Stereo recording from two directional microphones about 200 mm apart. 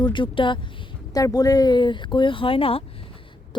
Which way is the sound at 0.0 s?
25° left (ahead or behind).